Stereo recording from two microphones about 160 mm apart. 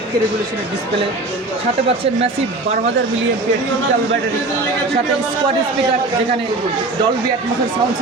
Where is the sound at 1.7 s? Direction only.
40° right (ahead or behind).